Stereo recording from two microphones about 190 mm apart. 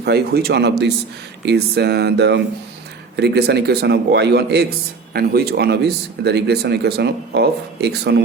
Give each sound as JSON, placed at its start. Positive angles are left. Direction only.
{"t": 0.0, "sound": "speech", "side_deg": -60}